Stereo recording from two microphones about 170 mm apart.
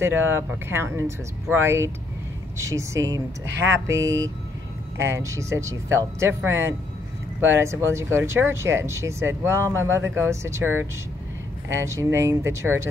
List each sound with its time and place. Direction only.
0.0 s speech: 15° right (ahead or behind)